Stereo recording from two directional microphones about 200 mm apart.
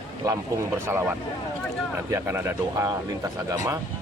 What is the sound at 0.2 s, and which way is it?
Speech, 15° right (ahead or behind).